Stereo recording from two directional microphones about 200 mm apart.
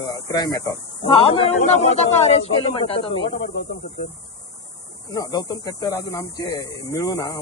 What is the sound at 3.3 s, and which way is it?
Speech, 60° left (ahead or behind).